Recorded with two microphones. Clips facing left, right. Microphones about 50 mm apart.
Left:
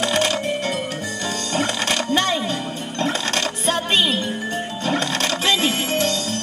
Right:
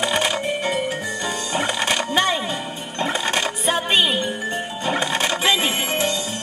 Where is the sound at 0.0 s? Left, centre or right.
Centre.